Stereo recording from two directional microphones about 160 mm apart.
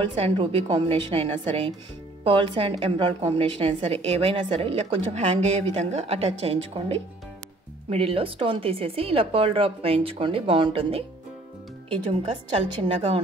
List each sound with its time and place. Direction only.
0.1 s a woman's voice: 35° right (ahead or behind)